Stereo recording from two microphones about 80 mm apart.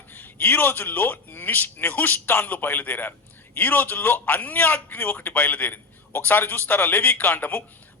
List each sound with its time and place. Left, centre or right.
0.1 s a man's voice: left